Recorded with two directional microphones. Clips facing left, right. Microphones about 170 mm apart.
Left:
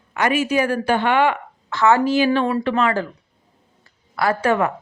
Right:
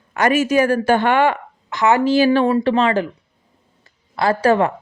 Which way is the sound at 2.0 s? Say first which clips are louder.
Right 3 dB; 35° right (ahead or behind).